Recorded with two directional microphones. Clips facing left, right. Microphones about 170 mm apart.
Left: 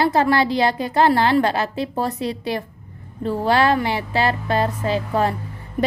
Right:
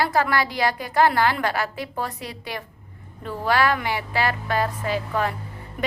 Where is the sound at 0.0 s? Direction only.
25° left (ahead or behind).